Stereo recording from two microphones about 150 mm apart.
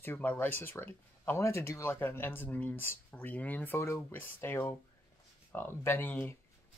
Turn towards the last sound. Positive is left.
turn(degrees=15)  # may be behind; listen again after turning